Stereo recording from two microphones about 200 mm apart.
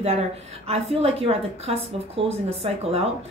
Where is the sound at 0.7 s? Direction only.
30° right (ahead or behind).